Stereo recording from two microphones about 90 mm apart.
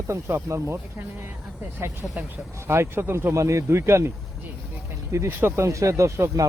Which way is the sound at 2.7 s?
25° right (ahead or behind).